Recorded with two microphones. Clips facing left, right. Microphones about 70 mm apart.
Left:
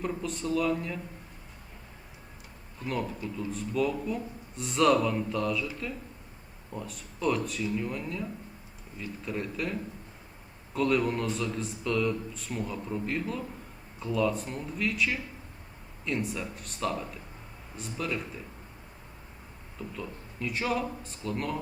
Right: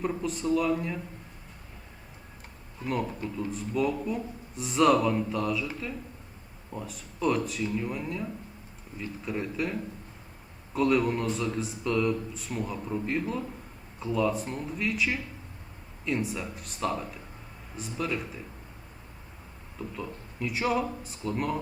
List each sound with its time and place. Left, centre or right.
0.0 s speech: centre
2.8 s speech: centre
6.7 s speech: centre
10.8 s speech: centre
20.0 s speech: centre